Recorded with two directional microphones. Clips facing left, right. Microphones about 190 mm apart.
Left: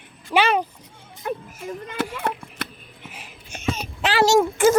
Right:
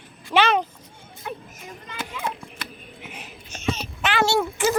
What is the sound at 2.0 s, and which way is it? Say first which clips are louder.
Speech: left 4 dB; 65° left (ahead or behind).